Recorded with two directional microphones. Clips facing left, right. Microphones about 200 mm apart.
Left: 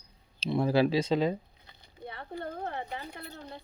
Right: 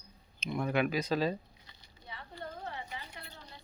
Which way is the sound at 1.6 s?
55° left (ahead or behind).